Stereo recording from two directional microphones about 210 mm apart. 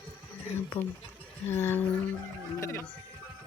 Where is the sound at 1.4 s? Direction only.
10° left (ahead or behind).